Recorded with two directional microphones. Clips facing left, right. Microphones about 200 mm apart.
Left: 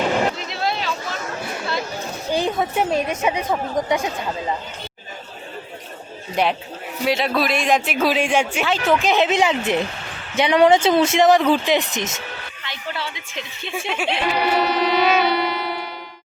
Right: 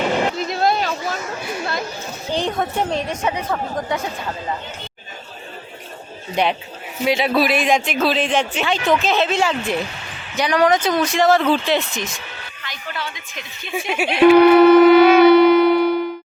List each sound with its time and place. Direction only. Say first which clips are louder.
0.3 s vehicle: right 6 dB; 45° right (ahead or behind)
2.3 s speech: left 1 dB; 5° left (ahead or behind)
6.3 s speech: right 1 dB; centre (ahead or behind); by 13.7 s 25° left (ahead or behind)
13.7 s speech: right 4 dB; 10° right (ahead or behind)
14.3 s shofar: right 12 dB; 55° right (ahead or behind)